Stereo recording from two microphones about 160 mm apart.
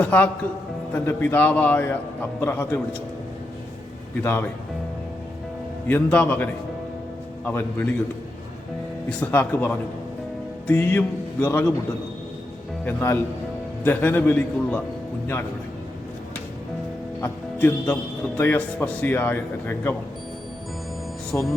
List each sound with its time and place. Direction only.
0.0 s speech: 10° left (ahead or behind)
4.2 s speech: 15° left (ahead or behind)
5.9 s speech: 10° left (ahead or behind)
9.0 s speech: 10° left (ahead or behind)
12.8 s speech: 15° left (ahead or behind)
17.2 s speech: 15° left (ahead or behind)
21.3 s speech: 10° left (ahead or behind)